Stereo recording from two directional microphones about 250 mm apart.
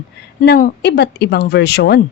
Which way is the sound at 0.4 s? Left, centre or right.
Left.